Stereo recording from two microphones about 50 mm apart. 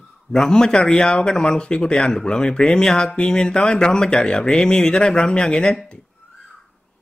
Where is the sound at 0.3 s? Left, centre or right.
Centre.